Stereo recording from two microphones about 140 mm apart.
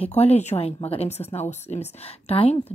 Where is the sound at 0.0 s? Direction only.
50° left (ahead or behind).